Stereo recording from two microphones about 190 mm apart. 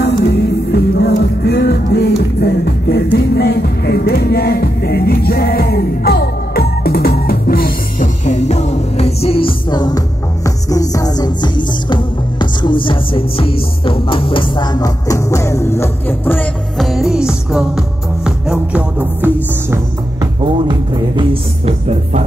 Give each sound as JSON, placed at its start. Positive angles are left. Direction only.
{"t": 0.0, "sound": "music", "side_deg": 60}
{"t": 20.4, "sound": "music", "side_deg": -25}